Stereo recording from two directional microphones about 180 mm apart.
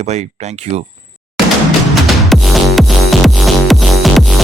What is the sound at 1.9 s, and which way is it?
Music, centre (ahead or behind).